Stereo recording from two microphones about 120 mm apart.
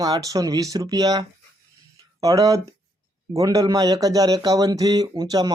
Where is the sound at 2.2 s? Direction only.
30° right (ahead or behind).